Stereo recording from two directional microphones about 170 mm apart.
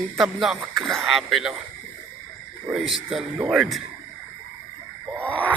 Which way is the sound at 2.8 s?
Centre (ahead or behind).